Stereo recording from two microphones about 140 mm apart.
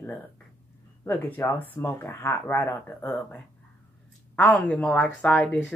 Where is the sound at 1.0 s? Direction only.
15° left (ahead or behind).